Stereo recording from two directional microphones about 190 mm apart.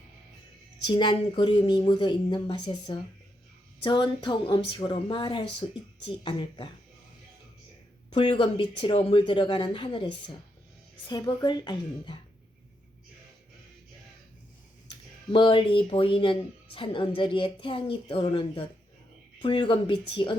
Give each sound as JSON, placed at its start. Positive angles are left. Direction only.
{"t": 0.9, "sound": "speech", "side_deg": 25}
{"t": 8.1, "sound": "speech", "side_deg": 25}
{"t": 15.3, "sound": "speech", "side_deg": 25}